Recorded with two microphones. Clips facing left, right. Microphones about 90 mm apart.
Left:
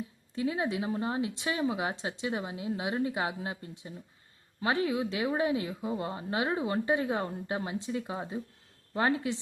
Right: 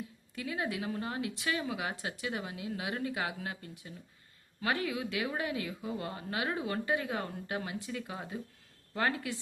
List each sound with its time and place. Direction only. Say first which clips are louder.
0.3 s speech: left 5 dB; 25° left (ahead or behind)